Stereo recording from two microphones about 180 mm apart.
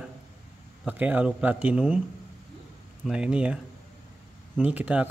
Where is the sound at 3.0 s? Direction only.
5° right (ahead or behind).